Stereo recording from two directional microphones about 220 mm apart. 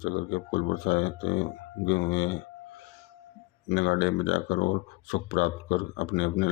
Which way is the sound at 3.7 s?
45° left (ahead or behind).